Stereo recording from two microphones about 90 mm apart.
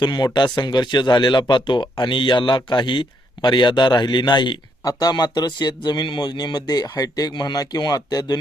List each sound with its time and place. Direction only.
0.0 s speech: 55° left (ahead or behind)
4.9 s speech: 45° left (ahead or behind)